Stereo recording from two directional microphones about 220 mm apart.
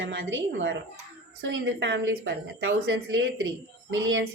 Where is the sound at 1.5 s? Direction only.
50° right (ahead or behind).